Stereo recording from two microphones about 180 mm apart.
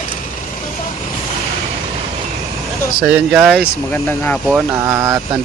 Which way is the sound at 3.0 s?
10° right (ahead or behind).